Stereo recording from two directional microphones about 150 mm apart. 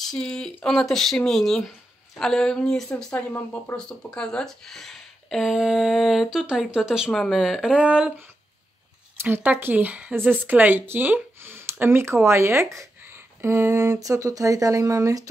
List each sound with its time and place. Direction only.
0.0 s speech: 5° left (ahead or behind)
9.2 s speech: 10° right (ahead or behind)